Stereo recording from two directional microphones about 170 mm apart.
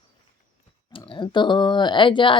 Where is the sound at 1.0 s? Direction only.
30° left (ahead or behind).